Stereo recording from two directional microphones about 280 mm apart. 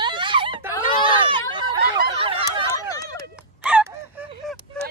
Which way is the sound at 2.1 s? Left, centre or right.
Centre.